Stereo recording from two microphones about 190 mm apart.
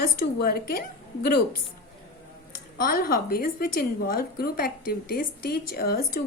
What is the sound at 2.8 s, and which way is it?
A woman's voice, 50° left (ahead or behind).